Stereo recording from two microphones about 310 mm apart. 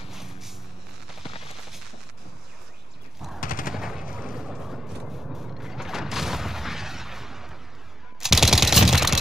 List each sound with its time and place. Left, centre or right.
0.1 s vehicle: centre
3.3 s machine gun: left
3.7 s machine gun: centre
4.1 s vehicle: centre
8.2 s typewriter: centre